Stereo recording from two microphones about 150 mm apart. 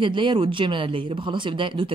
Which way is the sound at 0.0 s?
35° right (ahead or behind).